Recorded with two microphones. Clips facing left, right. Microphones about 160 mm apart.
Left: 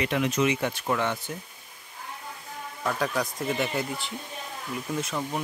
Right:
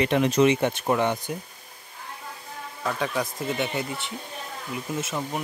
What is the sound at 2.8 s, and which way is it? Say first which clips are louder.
Speech: even; centre (ahead or behind).